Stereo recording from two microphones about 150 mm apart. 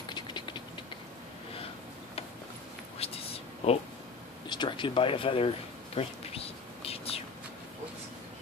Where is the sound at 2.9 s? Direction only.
40° left (ahead or behind).